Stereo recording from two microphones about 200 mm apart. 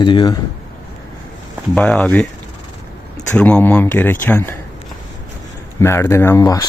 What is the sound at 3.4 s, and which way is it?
Speech, 5° left (ahead or behind).